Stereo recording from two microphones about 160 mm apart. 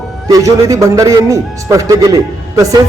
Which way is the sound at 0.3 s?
20° right (ahead or behind).